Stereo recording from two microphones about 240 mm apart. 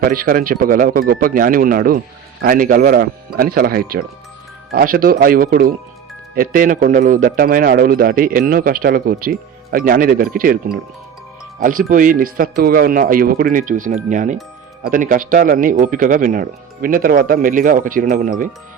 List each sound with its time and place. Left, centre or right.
0.0 s a man's voice: right